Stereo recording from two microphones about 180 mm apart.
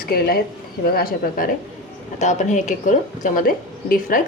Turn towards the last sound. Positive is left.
turn(degrees=50)  # may be behind; listen again after turning